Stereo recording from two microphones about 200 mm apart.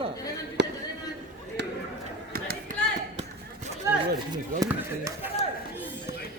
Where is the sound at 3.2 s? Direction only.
30° right (ahead or behind).